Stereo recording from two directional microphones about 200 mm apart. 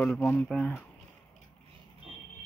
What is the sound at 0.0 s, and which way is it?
Speech, 5° left (ahead or behind).